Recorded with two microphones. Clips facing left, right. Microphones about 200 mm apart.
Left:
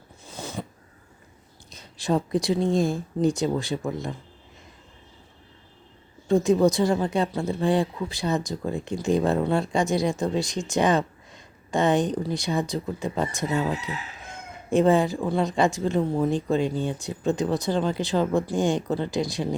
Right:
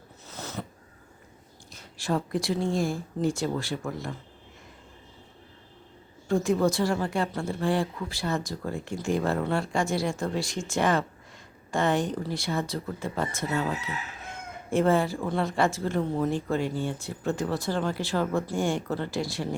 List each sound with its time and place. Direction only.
0.3 s a sound: 10° left (ahead or behind)
1.7 s speech: 20° left (ahead or behind)
6.2 s speech: 20° left (ahead or behind)